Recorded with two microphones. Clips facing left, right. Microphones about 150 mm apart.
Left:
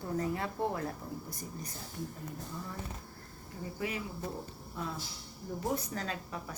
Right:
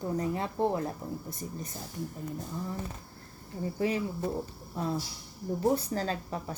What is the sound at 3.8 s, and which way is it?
Speech, 30° right (ahead or behind).